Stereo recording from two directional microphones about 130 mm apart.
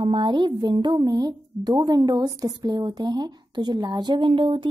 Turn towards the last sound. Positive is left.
turn(degrees=-40)  # may be behind; listen again after turning